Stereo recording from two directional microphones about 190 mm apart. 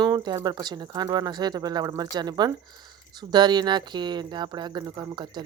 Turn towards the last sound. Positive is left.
turn(degrees=-25)  # may be behind; listen again after turning